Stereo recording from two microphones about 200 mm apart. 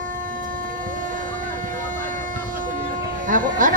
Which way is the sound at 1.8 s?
40° right (ahead or behind).